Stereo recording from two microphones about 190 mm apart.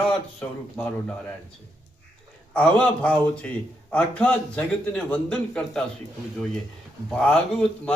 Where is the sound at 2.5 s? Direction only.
5° left (ahead or behind).